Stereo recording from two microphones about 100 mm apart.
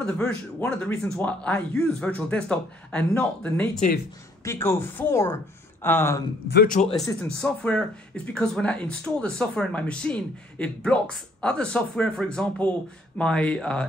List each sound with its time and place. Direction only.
0.0 s speech: 15° left (ahead or behind)
4.5 s speech: 25° left (ahead or behind)
6.8 s speech: 10° left (ahead or behind)